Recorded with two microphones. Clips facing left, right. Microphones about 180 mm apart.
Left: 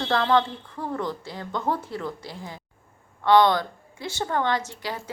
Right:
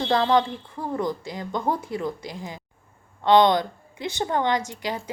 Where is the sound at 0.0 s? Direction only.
15° right (ahead or behind).